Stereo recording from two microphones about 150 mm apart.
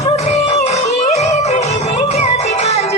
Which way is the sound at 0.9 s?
50° left (ahead or behind).